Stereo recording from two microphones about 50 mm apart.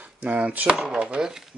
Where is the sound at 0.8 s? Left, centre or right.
Centre.